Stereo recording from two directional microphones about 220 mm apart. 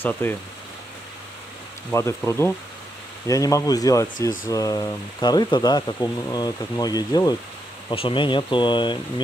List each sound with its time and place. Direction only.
0.0 s speech: 10° left (ahead or behind)
1.9 s speech: 10° left (ahead or behind)